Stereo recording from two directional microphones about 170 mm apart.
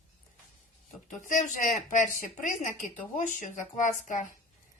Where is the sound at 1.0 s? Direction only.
50° left (ahead or behind).